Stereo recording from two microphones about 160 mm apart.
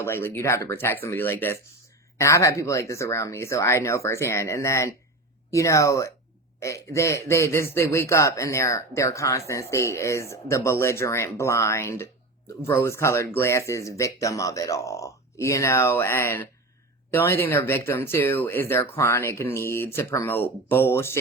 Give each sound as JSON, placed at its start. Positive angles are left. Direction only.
{"t": 0.0, "sound": "speech", "side_deg": 15}